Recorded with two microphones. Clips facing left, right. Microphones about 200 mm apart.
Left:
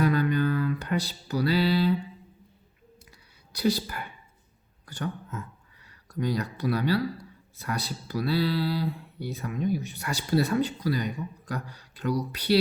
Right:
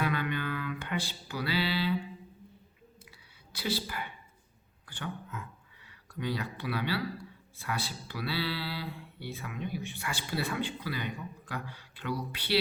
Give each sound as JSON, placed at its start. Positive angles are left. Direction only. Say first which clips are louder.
{"t": 0.0, "sound": "music", "louder": "left 8 dB", "side_deg": 40}
{"t": 3.1, "sound": "whispering", "louder": "left 1 dB", "side_deg": 45}
{"t": 4.9, "sound": "speech", "louder": "left 6 dB", "side_deg": 40}